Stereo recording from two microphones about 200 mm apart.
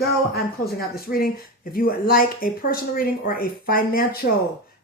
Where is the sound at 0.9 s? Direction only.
50° left (ahead or behind).